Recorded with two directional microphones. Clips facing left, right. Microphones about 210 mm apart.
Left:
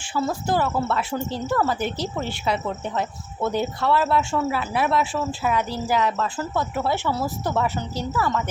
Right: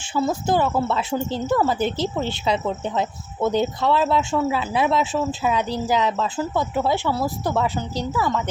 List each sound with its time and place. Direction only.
0.1 s a woman's voice: 20° right (ahead or behind)